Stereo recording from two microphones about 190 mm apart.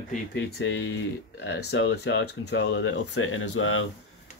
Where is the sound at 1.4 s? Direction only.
70° left (ahead or behind); by 3.8 s 90° left.